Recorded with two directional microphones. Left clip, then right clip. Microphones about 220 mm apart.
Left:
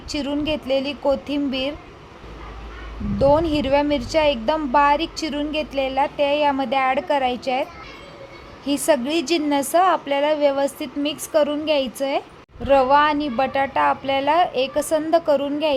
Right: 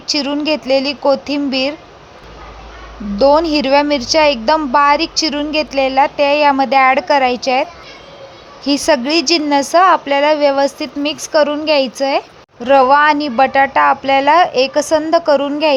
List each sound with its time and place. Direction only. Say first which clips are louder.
0.1 s a woman's voice: right 8 dB; 15° right (ahead or behind)
3.2 s a woman's voice: right 6 dB; 15° right (ahead or behind)